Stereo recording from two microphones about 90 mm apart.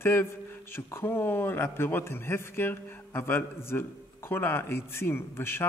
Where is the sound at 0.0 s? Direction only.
25° left (ahead or behind).